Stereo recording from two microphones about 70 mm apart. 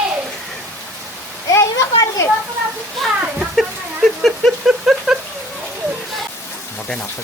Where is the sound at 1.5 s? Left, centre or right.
Left.